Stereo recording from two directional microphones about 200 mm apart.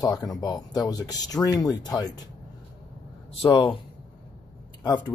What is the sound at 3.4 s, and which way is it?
Speech, 25° left (ahead or behind).